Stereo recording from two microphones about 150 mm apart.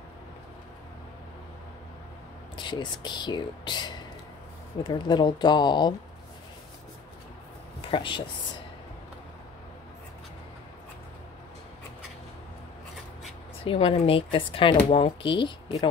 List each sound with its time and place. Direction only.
2.5 s speech: 30° left (ahead or behind)
7.9 s speech: 35° left (ahead or behind)
13.7 s speech: 35° left (ahead or behind)